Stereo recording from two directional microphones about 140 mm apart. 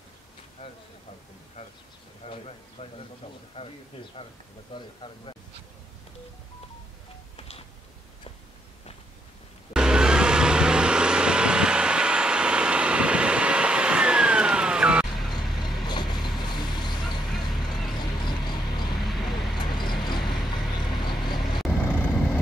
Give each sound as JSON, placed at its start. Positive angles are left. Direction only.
{"t": 2.2, "sound": "speech", "side_deg": 45}
{"t": 9.8, "sound": "vehicle", "side_deg": -5}
{"t": 15.8, "sound": "vehicle", "side_deg": 30}
{"t": 17.9, "sound": "a sound", "side_deg": 30}
{"t": 18.9, "sound": "vehicle", "side_deg": 0}
{"t": 19.6, "sound": "vehicle", "side_deg": 35}
{"t": 21.6, "sound": "vehicle", "side_deg": 10}